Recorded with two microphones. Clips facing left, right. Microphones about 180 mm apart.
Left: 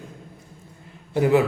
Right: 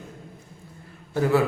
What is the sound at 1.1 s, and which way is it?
Speech, 15° left (ahead or behind).